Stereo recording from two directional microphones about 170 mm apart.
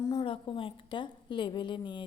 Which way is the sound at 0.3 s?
30° left (ahead or behind).